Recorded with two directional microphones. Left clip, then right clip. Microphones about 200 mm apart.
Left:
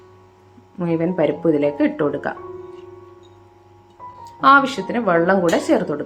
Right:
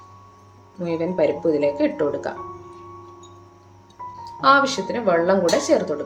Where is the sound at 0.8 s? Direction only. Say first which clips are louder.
Left 2 dB; 35° left (ahead or behind).